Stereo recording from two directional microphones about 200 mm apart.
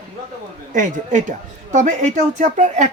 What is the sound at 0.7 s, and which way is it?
A man's voice, 40° right (ahead or behind).